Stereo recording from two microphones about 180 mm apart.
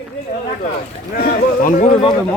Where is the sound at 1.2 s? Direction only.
50° left (ahead or behind).